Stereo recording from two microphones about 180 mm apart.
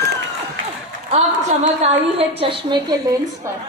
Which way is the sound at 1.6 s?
35° right (ahead or behind).